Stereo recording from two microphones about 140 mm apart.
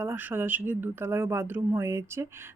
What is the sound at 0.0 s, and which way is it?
Speech, 15° right (ahead or behind).